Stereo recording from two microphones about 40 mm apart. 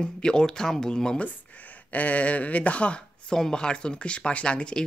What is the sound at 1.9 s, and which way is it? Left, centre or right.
Speech, left.